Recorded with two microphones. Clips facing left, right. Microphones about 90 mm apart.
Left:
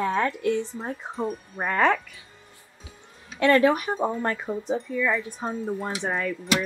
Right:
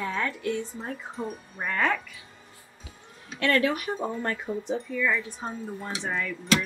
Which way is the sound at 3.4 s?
30° left (ahead or behind).